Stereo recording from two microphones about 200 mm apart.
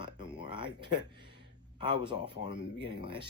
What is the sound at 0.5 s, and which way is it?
Speech, 25° right (ahead or behind).